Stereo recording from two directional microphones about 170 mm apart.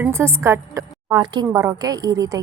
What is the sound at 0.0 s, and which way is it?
A woman's voice, 15° right (ahead or behind).